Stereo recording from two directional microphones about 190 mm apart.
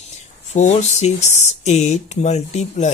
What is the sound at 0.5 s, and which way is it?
Speech, 35° left (ahead or behind).